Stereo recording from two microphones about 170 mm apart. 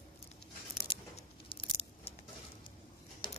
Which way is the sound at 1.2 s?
35° left (ahead or behind).